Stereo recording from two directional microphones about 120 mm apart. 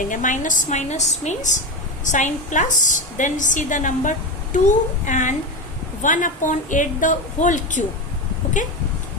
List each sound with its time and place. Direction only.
0.1 s a woman's voice: 90° left